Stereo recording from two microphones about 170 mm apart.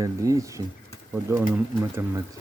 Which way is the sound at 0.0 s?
20° right (ahead or behind).